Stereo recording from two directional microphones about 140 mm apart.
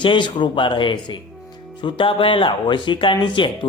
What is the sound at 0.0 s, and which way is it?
Speech, 35° left (ahead or behind).